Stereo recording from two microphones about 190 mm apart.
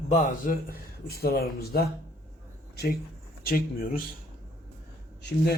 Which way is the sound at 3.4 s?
50° left (ahead or behind).